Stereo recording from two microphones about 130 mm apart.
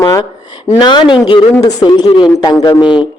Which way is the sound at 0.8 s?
35° left (ahead or behind).